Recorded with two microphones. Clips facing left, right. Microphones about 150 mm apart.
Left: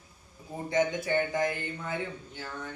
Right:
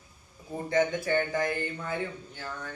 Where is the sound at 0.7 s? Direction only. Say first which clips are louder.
Right 1 dB; 20° left (ahead or behind).